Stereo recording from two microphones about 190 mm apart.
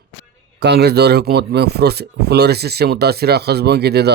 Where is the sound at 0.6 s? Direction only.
60° right (ahead or behind).